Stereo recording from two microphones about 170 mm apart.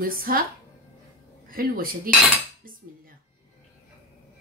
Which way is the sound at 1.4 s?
60° right (ahead or behind).